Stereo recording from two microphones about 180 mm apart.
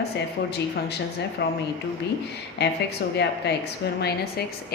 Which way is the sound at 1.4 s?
70° left (ahead or behind).